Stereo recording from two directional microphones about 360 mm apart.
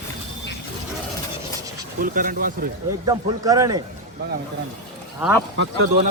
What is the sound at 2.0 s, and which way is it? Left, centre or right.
Speech, right.